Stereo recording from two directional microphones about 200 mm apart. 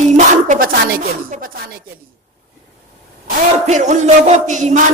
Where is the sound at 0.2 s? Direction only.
40° right (ahead or behind).